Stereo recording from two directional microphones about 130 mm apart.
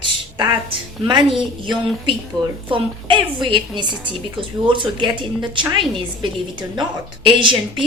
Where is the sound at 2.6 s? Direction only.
40° right (ahead or behind).